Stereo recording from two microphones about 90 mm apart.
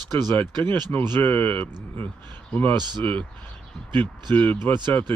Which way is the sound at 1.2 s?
20° left (ahead or behind).